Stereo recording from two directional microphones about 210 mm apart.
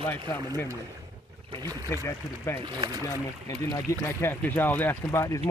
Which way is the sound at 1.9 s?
15° left (ahead or behind).